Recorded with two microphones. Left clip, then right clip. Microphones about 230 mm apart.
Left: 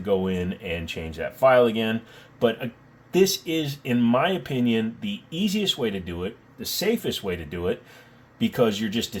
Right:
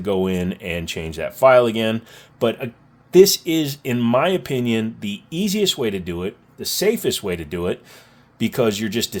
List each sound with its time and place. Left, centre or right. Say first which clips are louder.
0.0 s speech: right 3 dB; right